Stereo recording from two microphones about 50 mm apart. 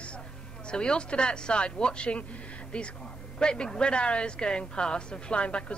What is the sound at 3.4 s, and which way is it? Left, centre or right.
Speech, centre.